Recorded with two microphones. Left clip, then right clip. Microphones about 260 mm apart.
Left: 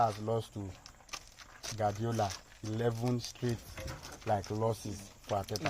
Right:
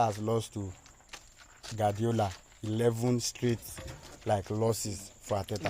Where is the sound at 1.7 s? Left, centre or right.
Right.